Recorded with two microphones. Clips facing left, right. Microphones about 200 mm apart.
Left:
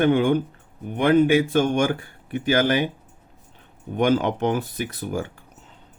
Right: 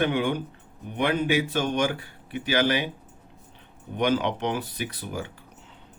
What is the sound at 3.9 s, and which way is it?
Speech, 50° left (ahead or behind).